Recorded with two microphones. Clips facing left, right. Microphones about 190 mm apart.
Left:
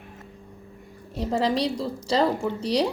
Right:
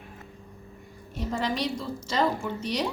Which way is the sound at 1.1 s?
30° left (ahead or behind).